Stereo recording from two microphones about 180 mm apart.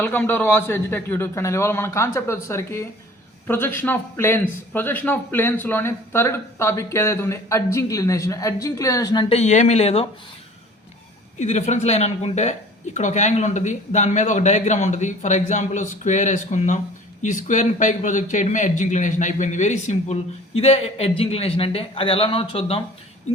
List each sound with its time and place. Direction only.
0.0 s a man's voice: 10° left (ahead or behind)
9.3 s a man's voice: 40° left (ahead or behind)
11.3 s a man's voice: 40° left (ahead or behind)